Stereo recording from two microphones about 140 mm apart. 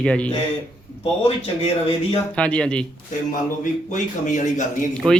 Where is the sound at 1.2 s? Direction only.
45° left (ahead or behind).